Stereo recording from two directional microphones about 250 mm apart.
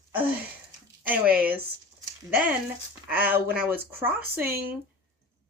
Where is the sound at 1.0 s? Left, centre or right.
Centre.